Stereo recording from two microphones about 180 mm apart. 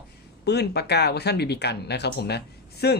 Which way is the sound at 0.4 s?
65° left (ahead or behind).